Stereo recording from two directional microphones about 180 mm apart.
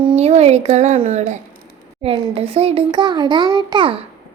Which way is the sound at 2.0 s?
30° right (ahead or behind).